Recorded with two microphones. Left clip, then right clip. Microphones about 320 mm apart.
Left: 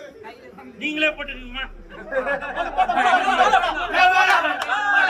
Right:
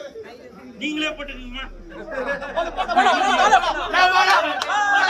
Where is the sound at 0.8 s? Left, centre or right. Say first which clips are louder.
Left 3 dB; centre.